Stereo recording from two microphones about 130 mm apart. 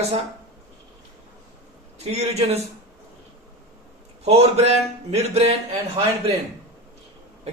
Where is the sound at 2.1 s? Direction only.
55° right (ahead or behind).